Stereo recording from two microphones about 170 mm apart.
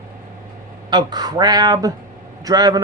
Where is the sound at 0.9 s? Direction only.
25° right (ahead or behind).